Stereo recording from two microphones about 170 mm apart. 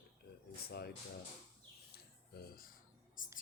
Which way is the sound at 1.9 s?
65° left (ahead or behind).